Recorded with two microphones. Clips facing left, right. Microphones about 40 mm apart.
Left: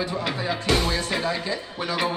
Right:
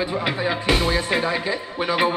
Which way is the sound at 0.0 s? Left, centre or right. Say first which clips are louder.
Right 4 dB; right.